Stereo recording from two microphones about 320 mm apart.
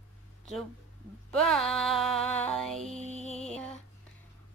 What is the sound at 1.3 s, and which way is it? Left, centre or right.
A woman's voice, centre.